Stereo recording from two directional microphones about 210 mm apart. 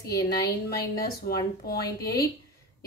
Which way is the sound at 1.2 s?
45° left (ahead or behind).